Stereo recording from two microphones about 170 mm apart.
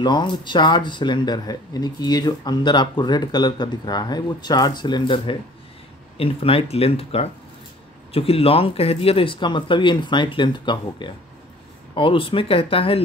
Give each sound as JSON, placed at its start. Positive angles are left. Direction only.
{"t": 0.0, "sound": "speech", "side_deg": 25}